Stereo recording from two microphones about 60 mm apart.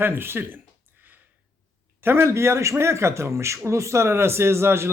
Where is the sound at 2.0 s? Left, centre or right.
Right.